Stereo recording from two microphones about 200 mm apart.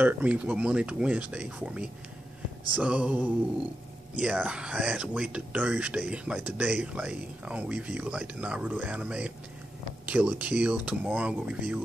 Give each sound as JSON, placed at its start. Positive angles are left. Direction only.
{"t": 0.0, "sound": "speech", "side_deg": -10}